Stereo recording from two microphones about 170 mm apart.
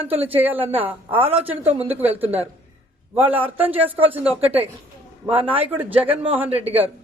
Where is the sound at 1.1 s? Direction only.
35° right (ahead or behind).